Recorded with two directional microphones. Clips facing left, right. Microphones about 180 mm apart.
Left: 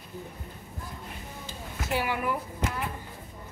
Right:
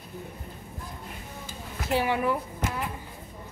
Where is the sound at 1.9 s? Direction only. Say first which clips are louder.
Right 4 dB; 20° right (ahead or behind).